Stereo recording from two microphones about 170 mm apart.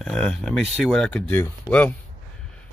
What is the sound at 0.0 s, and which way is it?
Speech, 5° left (ahead or behind).